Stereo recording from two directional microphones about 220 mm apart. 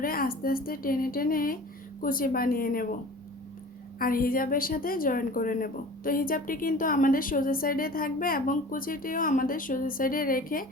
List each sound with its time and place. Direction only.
0.0 s a woman's voice: 40° left (ahead or behind)
3.9 s a woman's voice: 40° left (ahead or behind)